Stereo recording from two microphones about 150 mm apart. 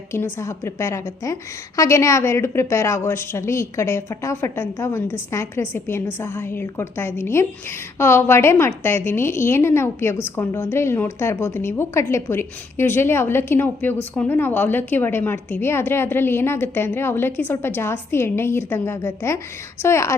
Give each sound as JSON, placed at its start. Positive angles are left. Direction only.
{"t": 0.1, "sound": "a woman's voice", "side_deg": 15}